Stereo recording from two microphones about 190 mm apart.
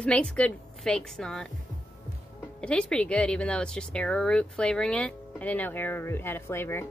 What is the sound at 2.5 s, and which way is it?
A woman's voice, 5° left (ahead or behind).